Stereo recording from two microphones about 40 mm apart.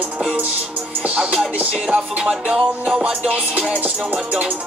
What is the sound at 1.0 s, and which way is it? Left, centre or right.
Music, right.